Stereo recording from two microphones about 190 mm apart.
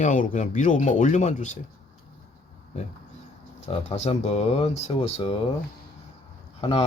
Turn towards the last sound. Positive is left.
turn(degrees=30)  # may be behind; listen again after turning